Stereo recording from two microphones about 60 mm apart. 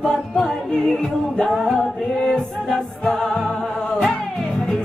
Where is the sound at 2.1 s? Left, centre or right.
Centre.